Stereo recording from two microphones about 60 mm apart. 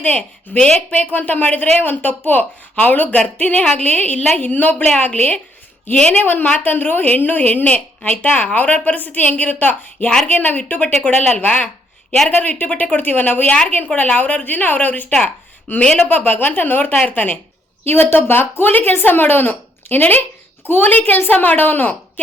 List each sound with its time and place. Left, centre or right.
0.0 s a woman's voice: left
15.8 s speech: centre
16.0 s a woman's voice: left
17.8 s speech: left